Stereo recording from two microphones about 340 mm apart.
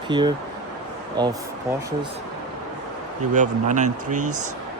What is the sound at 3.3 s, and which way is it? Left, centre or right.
Speech, right.